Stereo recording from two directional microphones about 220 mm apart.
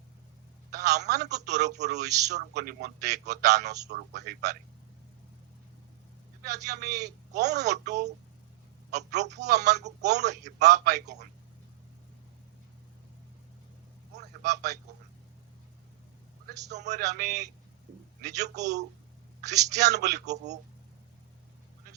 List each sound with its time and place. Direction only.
0.7 s a man's voice: 50° right (ahead or behind)
6.4 s speech: 50° right (ahead or behind)
9.5 s speech: 50° right (ahead or behind)
14.2 s a sound: 50° right (ahead or behind)
16.9 s a man's voice: 50° right (ahead or behind)
20.3 s speech: 30° right (ahead or behind)